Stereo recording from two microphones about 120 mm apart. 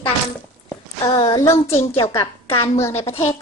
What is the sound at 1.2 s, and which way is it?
Speech, 30° left (ahead or behind).